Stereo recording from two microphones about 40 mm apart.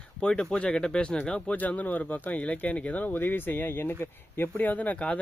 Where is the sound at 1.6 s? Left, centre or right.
Left.